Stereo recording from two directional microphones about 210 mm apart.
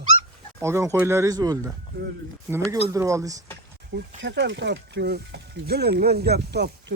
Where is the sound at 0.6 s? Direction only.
15° right (ahead or behind).